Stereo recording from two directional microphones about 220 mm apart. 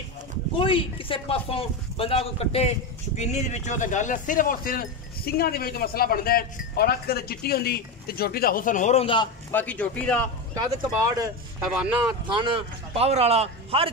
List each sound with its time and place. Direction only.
0.6 s speech: 25° left (ahead or behind)
9.5 s a man's voice: 5° left (ahead or behind)
10.5 s speech: 15° right (ahead or behind)
11.6 s speech: 5° right (ahead or behind)
12.3 s a man's voice: 20° right (ahead or behind)